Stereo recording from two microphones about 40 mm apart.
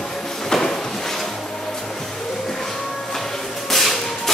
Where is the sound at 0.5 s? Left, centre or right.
Centre.